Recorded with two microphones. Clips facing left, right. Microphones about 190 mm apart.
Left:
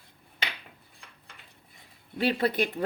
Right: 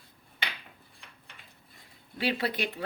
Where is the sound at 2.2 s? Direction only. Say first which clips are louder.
Left 4 dB; 50° left (ahead or behind).